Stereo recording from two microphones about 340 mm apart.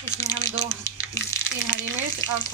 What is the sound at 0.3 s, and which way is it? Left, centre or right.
Speech, right.